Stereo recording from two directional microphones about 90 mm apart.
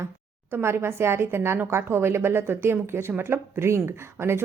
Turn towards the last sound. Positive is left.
turn(degrees=-30)  # may be behind; listen again after turning